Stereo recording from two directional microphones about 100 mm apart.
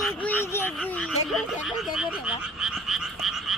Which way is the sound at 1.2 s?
Centre (ahead or behind).